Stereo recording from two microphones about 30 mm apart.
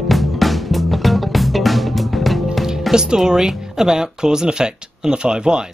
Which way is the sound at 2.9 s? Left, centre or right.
Right.